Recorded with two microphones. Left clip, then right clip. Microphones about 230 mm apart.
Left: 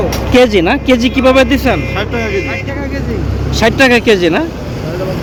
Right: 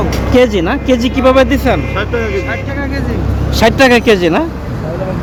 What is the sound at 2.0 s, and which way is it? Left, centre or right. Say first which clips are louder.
Speech: right 1 dB; left.